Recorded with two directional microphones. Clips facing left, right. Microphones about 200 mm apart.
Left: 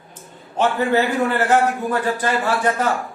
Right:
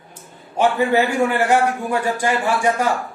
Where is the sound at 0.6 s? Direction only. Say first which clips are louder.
Right 1 dB; 10° right (ahead or behind).